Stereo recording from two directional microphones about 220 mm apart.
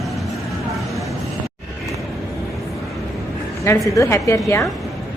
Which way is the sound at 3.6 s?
15° left (ahead or behind).